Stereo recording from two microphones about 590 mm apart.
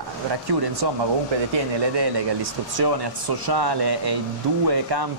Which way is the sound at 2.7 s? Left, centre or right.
Right.